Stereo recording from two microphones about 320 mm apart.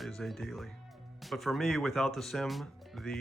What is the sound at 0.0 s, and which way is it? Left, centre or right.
Speech, centre.